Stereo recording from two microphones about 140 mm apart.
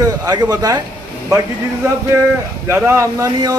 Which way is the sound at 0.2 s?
25° right (ahead or behind).